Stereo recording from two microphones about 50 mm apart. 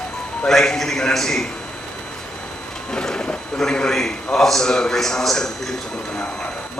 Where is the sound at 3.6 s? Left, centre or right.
Centre.